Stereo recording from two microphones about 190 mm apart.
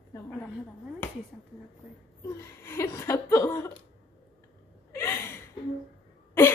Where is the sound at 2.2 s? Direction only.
15° left (ahead or behind).